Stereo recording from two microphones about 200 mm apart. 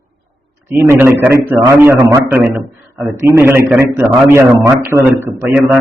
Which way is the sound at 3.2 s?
10° right (ahead or behind).